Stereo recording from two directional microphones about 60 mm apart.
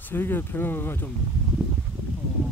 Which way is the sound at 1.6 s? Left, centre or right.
Centre.